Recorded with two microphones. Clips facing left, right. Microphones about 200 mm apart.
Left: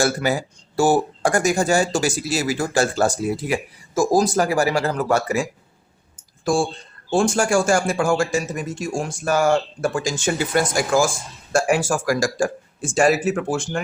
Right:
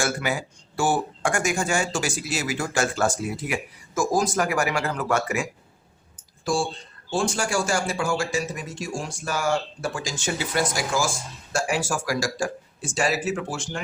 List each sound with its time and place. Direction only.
0.0 s speech: 35° left (ahead or behind)
6.4 s a man's voice: 50° left (ahead or behind)